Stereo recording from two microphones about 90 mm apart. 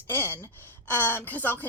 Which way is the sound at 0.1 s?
20° left (ahead or behind).